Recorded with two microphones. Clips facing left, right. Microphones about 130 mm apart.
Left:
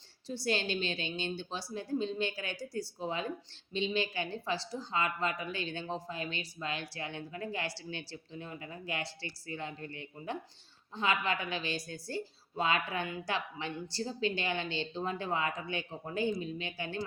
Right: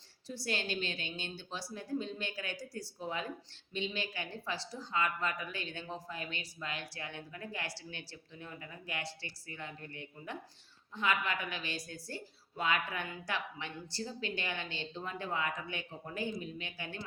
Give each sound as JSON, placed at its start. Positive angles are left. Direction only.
{"t": 0.3, "sound": "speech", "side_deg": 25}